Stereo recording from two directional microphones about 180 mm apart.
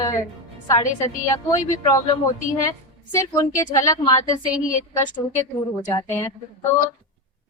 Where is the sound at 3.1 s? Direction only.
15° left (ahead or behind).